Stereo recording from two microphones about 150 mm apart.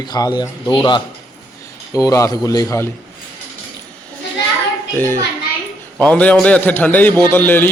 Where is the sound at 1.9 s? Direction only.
20° left (ahead or behind).